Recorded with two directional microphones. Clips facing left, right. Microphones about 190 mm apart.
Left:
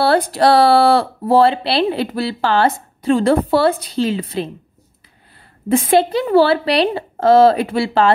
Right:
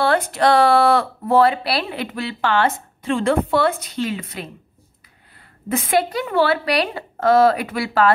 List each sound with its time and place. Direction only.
0.0 s speech: 35° left (ahead or behind)
5.7 s a woman's voice: 30° left (ahead or behind)